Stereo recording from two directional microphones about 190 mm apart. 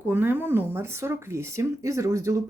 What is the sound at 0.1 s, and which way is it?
A woman's voice, 10° right (ahead or behind).